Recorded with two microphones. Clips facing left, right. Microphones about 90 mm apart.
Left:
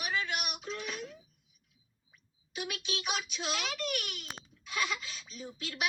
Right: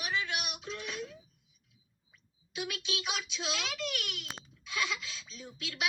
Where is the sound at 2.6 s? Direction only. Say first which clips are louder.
Right 1 dB; 10° left (ahead or behind).